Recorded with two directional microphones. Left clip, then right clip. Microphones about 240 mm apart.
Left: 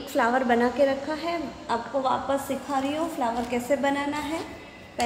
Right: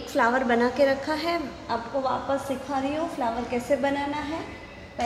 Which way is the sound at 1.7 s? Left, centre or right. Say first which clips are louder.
Left 1 dB; centre.